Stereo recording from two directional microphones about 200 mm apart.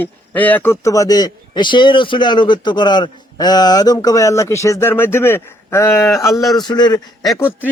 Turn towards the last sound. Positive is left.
turn(degrees=10)  # may be behind; listen again after turning